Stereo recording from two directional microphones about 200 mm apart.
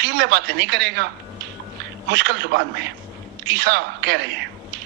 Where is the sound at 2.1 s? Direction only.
60° right (ahead or behind).